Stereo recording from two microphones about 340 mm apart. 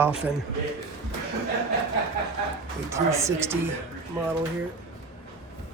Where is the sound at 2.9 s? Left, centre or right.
Centre.